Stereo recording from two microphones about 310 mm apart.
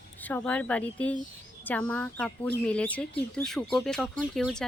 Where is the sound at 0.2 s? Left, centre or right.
Centre.